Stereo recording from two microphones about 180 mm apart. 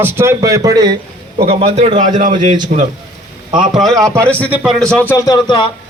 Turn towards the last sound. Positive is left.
turn(degrees=25)  # may be behind; listen again after turning